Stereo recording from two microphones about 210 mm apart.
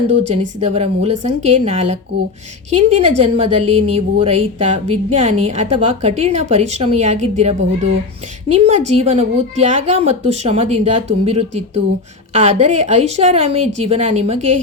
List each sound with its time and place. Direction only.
0.2 s a woman's voice: 30° right (ahead or behind)